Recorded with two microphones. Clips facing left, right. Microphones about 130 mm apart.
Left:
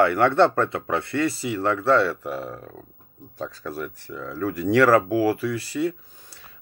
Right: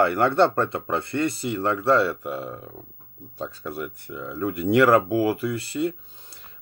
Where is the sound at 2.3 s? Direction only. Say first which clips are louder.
Even; 25° right (ahead or behind).